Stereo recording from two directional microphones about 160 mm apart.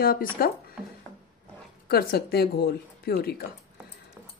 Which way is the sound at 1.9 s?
80° left.